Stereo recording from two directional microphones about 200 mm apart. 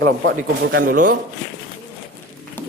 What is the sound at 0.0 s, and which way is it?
Speech, 60° right (ahead or behind).